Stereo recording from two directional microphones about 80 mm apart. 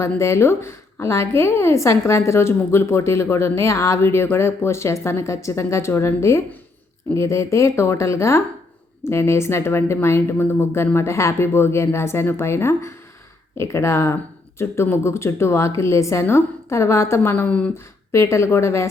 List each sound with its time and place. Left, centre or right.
0.0 s a woman's voice: left
18.1 s a woman's voice: left